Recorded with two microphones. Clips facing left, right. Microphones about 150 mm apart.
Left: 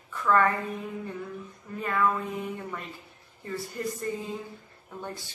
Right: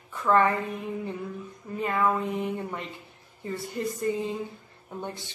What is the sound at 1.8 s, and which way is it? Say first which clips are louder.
Speech: right 1 dB; 20° right (ahead or behind).